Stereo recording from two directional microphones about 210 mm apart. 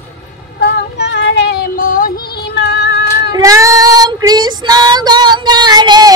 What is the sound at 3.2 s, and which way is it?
Female singing, 15° right (ahead or behind).